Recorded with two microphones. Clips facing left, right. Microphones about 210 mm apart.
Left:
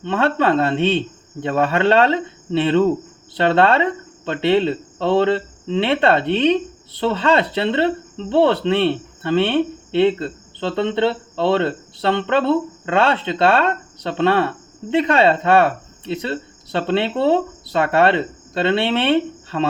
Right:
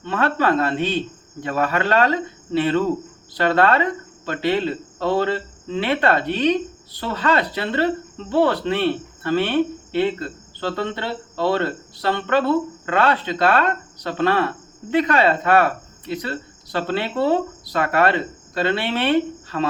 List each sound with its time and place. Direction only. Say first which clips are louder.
0.0 s speech: left 3 dB; 25° left (ahead or behind)